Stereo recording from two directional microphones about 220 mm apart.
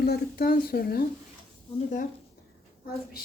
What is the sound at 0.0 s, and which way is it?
A woman's voice, 45° left (ahead or behind).